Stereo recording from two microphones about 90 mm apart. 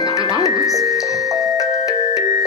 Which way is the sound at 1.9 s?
40° left (ahead or behind).